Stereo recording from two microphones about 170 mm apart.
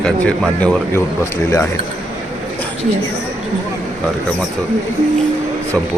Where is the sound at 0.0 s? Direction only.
5° left (ahead or behind).